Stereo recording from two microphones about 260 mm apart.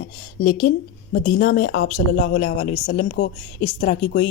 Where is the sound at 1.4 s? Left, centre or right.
Left.